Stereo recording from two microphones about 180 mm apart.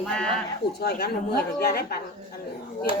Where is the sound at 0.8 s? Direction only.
65° left (ahead or behind).